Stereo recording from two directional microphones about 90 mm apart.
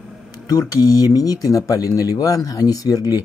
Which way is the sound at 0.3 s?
45° left (ahead or behind).